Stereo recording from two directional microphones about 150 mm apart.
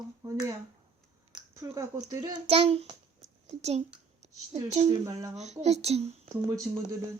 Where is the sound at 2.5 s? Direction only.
40° right (ahead or behind).